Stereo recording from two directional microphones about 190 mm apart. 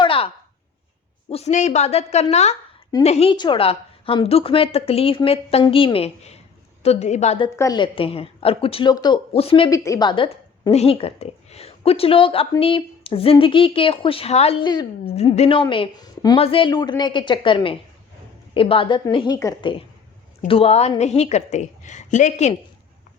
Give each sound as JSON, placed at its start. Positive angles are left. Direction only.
{"t": 0.0, "sound": "a sound", "side_deg": 30}
{"t": 1.3, "sound": "a woman's voice", "side_deg": 35}
{"t": 7.5, "sound": "a woman's voice", "side_deg": 20}
{"t": 9.6, "sound": "a woman's voice", "side_deg": 15}
{"t": 15.1, "sound": "a woman's voice", "side_deg": 35}